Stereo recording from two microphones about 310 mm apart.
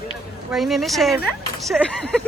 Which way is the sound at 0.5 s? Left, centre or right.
Centre.